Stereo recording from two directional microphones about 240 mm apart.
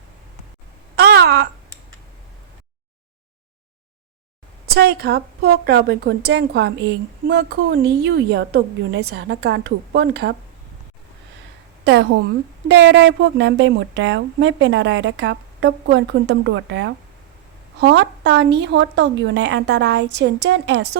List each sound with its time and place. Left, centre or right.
0.9 s wail: right
4.6 s a woman's voice: right
11.9 s a woman's voice: right